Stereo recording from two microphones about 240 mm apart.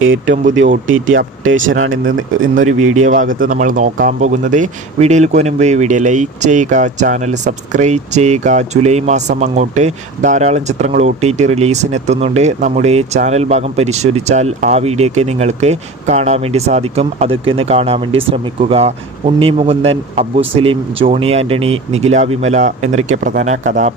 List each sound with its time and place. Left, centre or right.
0.0 s speech: right
3.3 s speech: right